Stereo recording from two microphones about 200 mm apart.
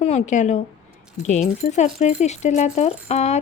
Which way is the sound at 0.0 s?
35° left (ahead or behind).